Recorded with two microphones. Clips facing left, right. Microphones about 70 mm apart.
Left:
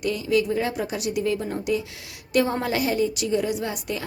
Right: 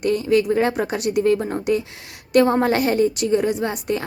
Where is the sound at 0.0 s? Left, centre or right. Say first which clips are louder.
Right 5 dB; right.